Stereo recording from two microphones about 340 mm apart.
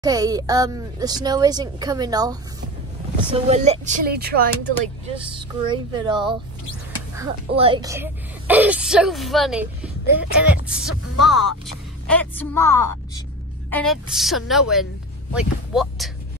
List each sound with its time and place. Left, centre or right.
0.0 s speech: centre
3.4 s speech: centre
5.0 s speech: centre